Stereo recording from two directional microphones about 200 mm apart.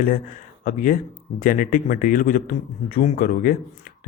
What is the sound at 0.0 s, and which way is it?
Speech, 45° left (ahead or behind).